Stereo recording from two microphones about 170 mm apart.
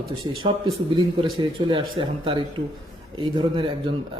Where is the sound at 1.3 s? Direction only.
30° right (ahead or behind).